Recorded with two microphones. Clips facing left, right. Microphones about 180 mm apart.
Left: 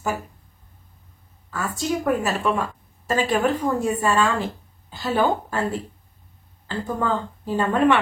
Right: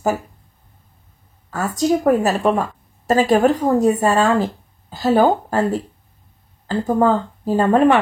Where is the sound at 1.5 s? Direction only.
40° right (ahead or behind).